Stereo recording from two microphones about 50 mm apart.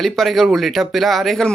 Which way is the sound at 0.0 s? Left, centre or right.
Centre.